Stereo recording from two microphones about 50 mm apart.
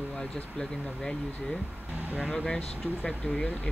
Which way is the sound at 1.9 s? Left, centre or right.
Right.